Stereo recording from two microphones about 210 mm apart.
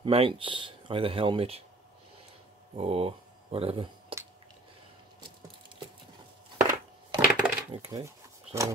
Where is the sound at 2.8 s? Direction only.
30° right (ahead or behind).